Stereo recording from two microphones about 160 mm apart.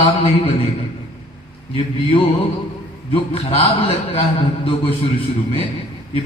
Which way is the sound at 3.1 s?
35° left (ahead or behind).